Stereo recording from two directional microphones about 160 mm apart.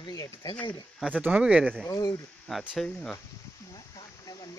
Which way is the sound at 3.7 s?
20° left (ahead or behind).